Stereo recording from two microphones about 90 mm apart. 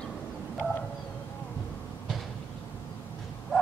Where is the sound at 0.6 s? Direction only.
15° right (ahead or behind).